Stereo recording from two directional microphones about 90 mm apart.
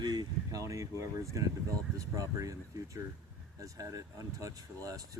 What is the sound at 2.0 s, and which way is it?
Speech, 40° right (ahead or behind).